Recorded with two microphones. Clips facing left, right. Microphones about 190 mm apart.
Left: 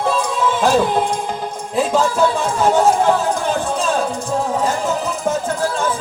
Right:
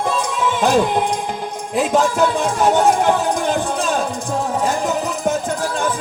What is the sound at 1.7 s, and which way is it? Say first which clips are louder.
Speech: even; 15° right (ahead or behind).